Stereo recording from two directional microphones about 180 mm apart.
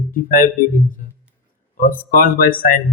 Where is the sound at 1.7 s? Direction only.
45° left (ahead or behind).